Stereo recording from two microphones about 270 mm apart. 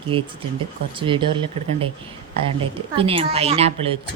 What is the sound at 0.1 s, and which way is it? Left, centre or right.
A woman's voice, centre.